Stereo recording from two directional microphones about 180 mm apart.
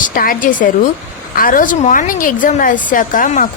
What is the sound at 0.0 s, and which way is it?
A woman's voice, 50° left (ahead or behind).